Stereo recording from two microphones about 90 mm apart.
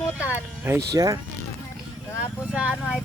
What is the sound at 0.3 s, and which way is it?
Speech, 20° right (ahead or behind).